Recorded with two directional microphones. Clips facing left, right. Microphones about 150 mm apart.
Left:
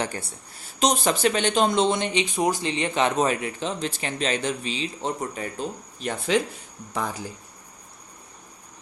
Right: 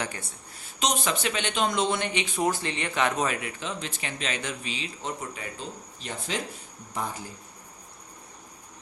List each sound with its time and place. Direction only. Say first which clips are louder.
0.0 s speech: left 5 dB; 35° left (ahead or behind); by 6.4 s 65° left (ahead or behind)